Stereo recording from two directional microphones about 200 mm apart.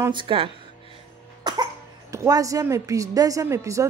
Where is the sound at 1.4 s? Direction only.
20° right (ahead or behind).